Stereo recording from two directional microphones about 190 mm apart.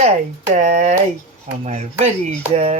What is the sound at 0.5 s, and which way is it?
Speech, 40° right (ahead or behind).